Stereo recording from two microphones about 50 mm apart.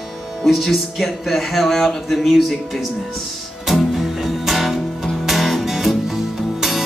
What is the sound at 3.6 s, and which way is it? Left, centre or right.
Music, centre.